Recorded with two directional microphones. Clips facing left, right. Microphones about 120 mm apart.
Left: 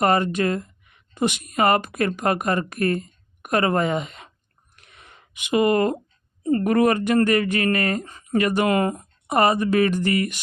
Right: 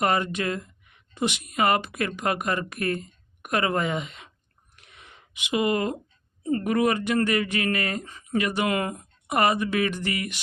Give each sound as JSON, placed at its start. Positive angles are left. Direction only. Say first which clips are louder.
{"t": 0.0, "sound": "speech", "louder": "left 5 dB", "side_deg": 40}
{"t": 4.8, "sound": "a sound", "louder": "left 1 dB", "side_deg": 45}
{"t": 6.4, "sound": "speech", "louder": "left 5 dB", "side_deg": 40}